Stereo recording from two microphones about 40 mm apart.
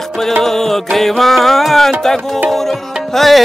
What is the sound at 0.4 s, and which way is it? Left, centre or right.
Music, centre.